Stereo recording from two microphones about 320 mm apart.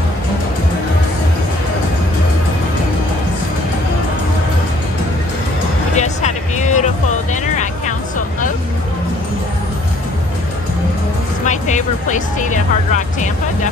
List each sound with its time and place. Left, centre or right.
5.9 s music: left
11.4 s music: left